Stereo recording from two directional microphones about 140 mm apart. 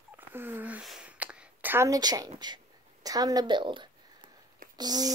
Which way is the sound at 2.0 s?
30° right (ahead or behind).